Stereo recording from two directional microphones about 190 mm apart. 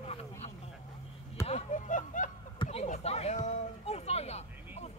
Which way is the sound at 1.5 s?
40° left (ahead or behind).